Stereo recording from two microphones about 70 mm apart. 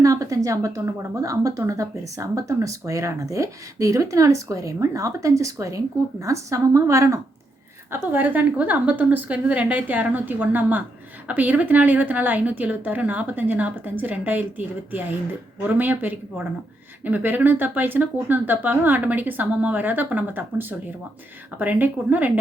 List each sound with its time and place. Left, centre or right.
0.0 s a woman's voice: right
7.9 s speech: right
15.6 s speech: right